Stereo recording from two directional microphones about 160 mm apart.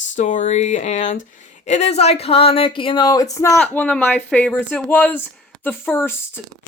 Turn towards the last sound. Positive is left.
turn(degrees=15)  # may be behind; listen again after turning